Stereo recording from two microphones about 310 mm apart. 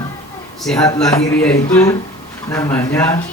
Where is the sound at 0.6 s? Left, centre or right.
Centre.